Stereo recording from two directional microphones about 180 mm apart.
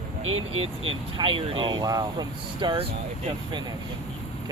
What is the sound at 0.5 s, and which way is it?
Speech, 30° right (ahead or behind).